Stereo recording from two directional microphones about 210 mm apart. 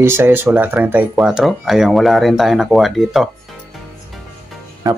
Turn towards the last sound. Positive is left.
turn(degrees=-15)  # may be behind; listen again after turning